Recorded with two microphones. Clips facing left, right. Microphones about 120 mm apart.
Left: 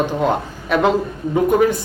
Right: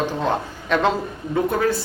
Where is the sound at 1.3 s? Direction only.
20° left (ahead or behind).